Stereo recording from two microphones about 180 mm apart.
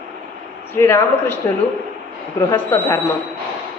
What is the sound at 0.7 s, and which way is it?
Speech, 15° left (ahead or behind).